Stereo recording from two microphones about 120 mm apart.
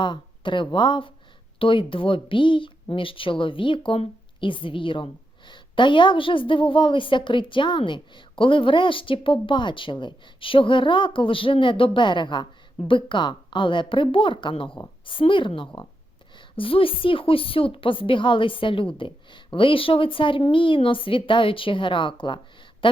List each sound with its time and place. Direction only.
0.0 s a woman's voice: 40° left (ahead or behind)